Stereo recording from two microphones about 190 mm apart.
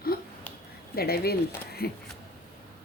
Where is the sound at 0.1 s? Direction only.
50° left (ahead or behind).